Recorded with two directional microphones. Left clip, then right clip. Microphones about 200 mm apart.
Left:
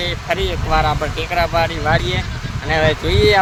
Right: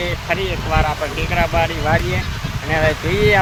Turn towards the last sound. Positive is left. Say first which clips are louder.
# left 1 dB
turn(degrees=5)  # may be behind; listen again after turning